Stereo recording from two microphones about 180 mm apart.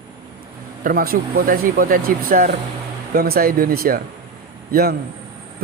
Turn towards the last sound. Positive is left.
turn(degrees=-55)  # may be behind; listen again after turning